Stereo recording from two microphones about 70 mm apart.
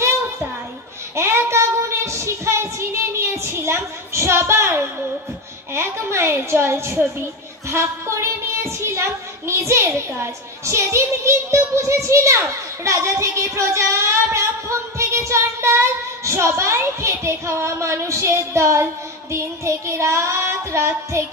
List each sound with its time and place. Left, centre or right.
1.1 s child singing: right
5.7 s a woman's voice: right
7.7 s child singing: right